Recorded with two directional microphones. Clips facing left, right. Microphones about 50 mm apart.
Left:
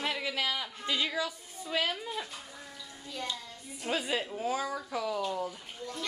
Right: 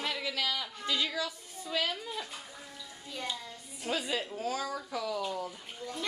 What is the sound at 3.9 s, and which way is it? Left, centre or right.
A woman's voice, centre.